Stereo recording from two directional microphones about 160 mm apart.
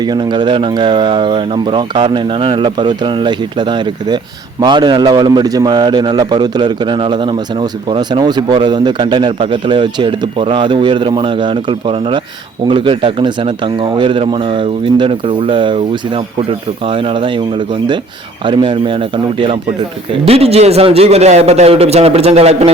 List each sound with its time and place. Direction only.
0.0 s a man's voice: 25° right (ahead or behind)
18.4 s speech: 30° right (ahead or behind)